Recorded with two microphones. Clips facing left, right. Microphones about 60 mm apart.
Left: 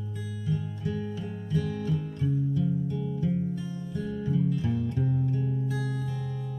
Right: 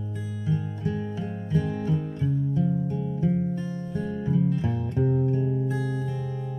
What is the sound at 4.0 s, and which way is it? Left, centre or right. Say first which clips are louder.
Music: right 3 dB; right.